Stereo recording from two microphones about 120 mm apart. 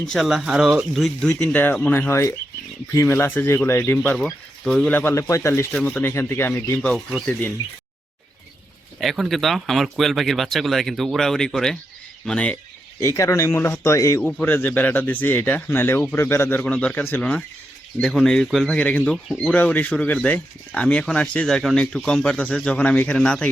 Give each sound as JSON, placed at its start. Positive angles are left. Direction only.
{"t": 0.1, "sound": "speech", "side_deg": 0}
{"t": 4.9, "sound": "speech", "side_deg": 20}
{"t": 9.0, "sound": "speech", "side_deg": 0}
{"t": 13.0, "sound": "speech", "side_deg": 25}
{"t": 14.4, "sound": "speech", "side_deg": 15}
{"t": 18.0, "sound": "speech", "side_deg": 0}